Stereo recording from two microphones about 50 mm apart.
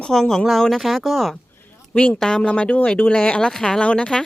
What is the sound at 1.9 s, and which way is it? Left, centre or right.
Speech, left.